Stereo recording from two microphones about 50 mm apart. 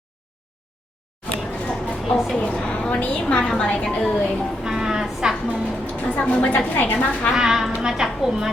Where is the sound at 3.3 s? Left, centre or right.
Centre.